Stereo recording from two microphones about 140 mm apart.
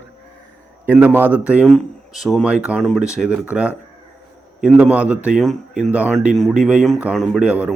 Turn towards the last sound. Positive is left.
turn(degrees=-10)  # may be behind; listen again after turning